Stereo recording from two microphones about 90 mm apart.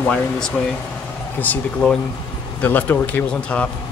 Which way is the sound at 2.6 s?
20° left (ahead or behind).